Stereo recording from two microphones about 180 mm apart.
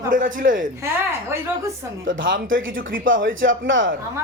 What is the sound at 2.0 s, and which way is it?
Speech, 90° right.